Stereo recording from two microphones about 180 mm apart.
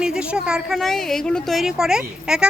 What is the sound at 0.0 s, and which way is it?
A woman's voice, 5° right (ahead or behind).